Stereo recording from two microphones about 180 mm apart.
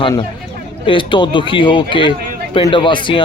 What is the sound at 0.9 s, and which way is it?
A man's voice, 30° left (ahead or behind).